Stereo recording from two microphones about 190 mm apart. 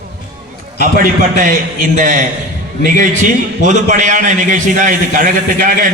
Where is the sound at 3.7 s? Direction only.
40° right (ahead or behind).